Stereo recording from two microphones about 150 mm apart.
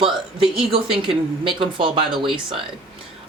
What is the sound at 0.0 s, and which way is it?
A woman's voice, 35° right (ahead or behind).